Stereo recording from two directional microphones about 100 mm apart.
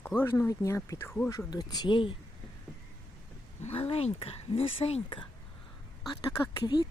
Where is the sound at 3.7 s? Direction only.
80° left.